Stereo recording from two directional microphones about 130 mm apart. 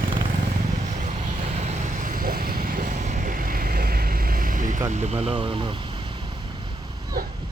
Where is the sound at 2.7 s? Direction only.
80° right.